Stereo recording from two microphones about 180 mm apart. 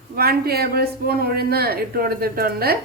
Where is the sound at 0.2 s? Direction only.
60° right (ahead or behind).